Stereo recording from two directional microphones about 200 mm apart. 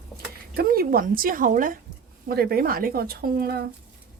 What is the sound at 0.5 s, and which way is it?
Speech, 50° right (ahead or behind).